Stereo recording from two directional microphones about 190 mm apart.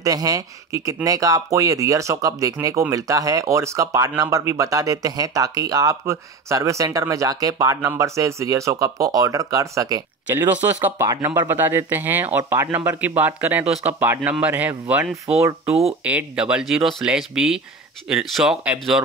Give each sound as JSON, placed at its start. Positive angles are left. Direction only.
{"t": 0.0, "sound": "speech", "side_deg": -20}